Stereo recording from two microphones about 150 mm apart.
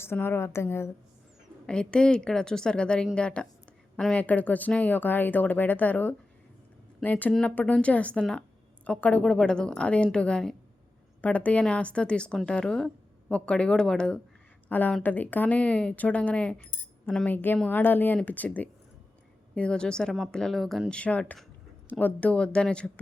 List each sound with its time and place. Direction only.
0.0 s speech: 15° left (ahead or behind)
1.6 s speech: 5° left (ahead or behind)